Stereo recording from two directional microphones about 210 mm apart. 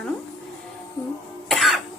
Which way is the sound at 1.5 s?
Centre (ahead or behind).